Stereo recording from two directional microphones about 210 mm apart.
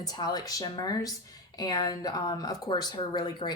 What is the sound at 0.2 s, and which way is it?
A woman's voice, 20° left (ahead or behind).